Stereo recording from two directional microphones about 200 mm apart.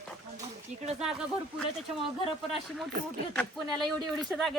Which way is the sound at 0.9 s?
5° right (ahead or behind).